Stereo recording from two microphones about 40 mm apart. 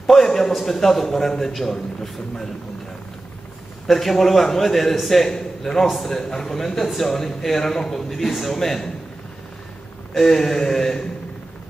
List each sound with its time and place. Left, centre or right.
0.0 s a man's voice: centre
3.8 s a man's voice: centre
8.1 s a man's voice: centre
10.1 s a man's voice: centre